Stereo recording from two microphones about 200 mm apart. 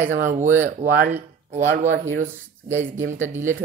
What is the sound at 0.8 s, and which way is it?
Speech, 40° right (ahead or behind).